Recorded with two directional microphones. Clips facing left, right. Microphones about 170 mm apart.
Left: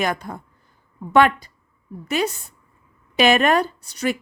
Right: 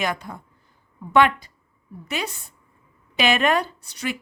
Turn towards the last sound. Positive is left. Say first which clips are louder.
# left 6 dB
turn(degrees=45)  # may be behind; listen again after turning